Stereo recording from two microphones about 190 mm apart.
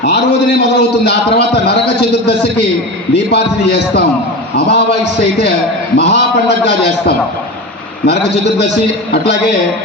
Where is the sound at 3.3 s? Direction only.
65° left (ahead or behind).